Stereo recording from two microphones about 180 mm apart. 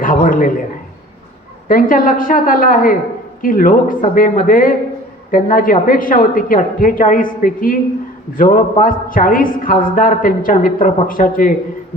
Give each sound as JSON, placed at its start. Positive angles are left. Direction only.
{"t": 0.0, "sound": "a man's voice", "side_deg": 50}
{"t": 1.6, "sound": "a woman's voice", "side_deg": 50}